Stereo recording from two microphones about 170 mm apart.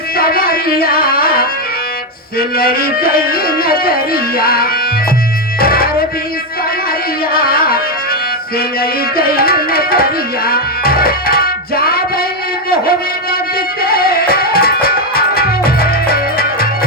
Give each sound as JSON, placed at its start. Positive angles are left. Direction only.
{"t": 0.2, "sound": "music", "side_deg": 60}
{"t": 7.3, "sound": "music", "side_deg": 60}
{"t": 8.5, "sound": "tabla", "side_deg": 60}
{"t": 13.8, "sound": "music", "side_deg": 60}